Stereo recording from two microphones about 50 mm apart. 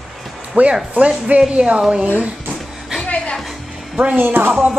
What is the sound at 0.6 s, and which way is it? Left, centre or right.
A woman's voice, right.